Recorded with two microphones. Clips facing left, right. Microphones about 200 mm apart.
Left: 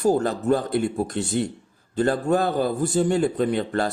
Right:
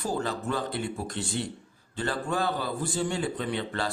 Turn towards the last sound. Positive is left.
turn(degrees=45)  # may be behind; listen again after turning